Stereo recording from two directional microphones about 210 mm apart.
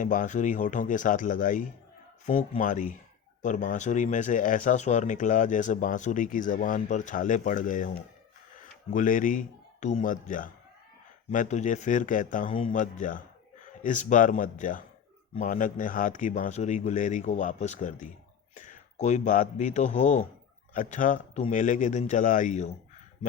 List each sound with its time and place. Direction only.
0.0 s speech: 40° left (ahead or behind)
8.9 s speech: 40° left (ahead or behind)
12.5 s speech: 25° left (ahead or behind)
12.7 s a man's voice: 40° left (ahead or behind)